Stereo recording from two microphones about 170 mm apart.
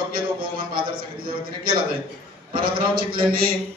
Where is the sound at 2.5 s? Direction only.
60° right (ahead or behind).